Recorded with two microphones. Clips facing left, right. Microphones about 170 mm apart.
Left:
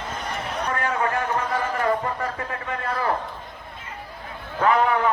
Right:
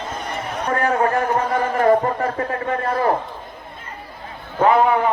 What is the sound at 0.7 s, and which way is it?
A man's voice, 40° right (ahead or behind).